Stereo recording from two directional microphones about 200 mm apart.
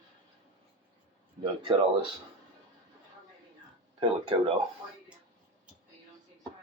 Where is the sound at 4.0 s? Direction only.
25° right (ahead or behind).